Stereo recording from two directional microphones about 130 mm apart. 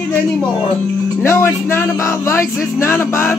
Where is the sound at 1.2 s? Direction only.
20° left (ahead or behind).